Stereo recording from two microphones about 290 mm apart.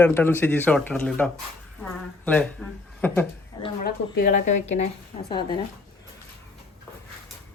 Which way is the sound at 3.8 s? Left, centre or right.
Left.